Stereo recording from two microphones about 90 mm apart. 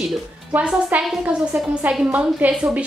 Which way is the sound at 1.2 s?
15° right (ahead or behind).